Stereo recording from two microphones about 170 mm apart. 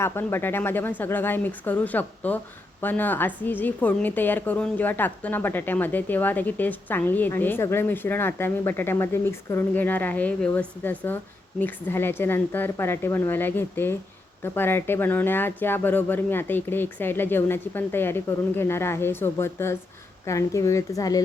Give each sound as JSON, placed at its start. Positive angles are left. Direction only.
{"t": 0.0, "sound": "a woman's voice", "side_deg": 15}